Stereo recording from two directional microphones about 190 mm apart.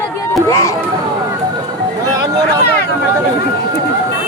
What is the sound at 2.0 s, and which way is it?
Vehicle, 15° right (ahead or behind).